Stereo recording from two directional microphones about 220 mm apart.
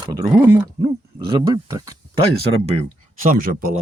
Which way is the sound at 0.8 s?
20° right (ahead or behind).